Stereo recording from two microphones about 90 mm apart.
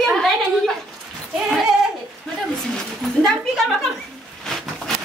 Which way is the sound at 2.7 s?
5° left (ahead or behind).